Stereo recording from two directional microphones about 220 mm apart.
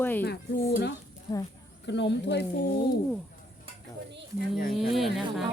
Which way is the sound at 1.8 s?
55° left (ahead or behind).